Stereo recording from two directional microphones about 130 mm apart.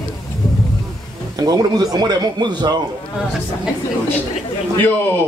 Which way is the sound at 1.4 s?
30° right (ahead or behind).